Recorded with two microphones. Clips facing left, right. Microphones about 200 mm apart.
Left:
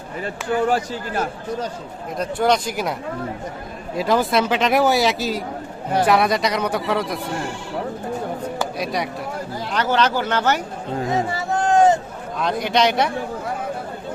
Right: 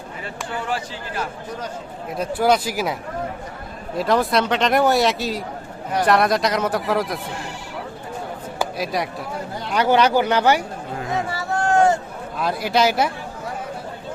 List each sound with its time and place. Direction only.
0.6 s speech: 45° left (ahead or behind)
2.1 s a man's voice: 5° right (ahead or behind)
3.9 s a man's voice: centre (ahead or behind)
8.5 s a sound: centre (ahead or behind)
9.7 s speech: 10° right (ahead or behind)
11.1 s a sound: 20° left (ahead or behind)
12.4 s a man's voice: 5° right (ahead or behind)